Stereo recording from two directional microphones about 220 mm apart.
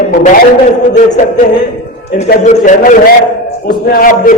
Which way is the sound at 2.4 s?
35° left (ahead or behind).